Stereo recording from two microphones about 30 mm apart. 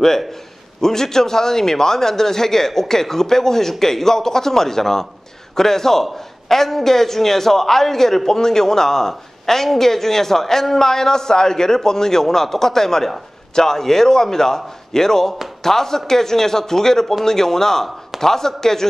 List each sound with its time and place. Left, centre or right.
0.7 s a man's voice: centre